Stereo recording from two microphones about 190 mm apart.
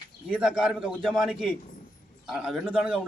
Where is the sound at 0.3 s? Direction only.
5° right (ahead or behind).